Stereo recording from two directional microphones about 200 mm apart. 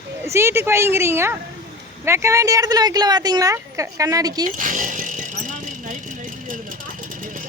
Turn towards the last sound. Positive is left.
turn(degrees=-40)  # may be behind; listen again after turning